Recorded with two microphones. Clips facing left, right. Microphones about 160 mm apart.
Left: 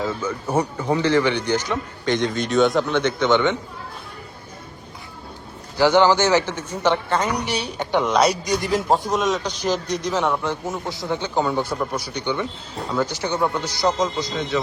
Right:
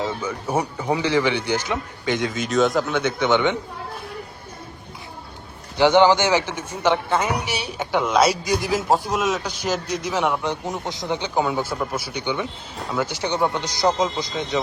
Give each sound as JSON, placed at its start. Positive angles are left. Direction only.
{"t": 0.0, "sound": "a man's voice", "side_deg": -15}
{"t": 5.7, "sound": "a man's voice", "side_deg": -20}
{"t": 11.4, "sound": "a man's voice", "side_deg": -5}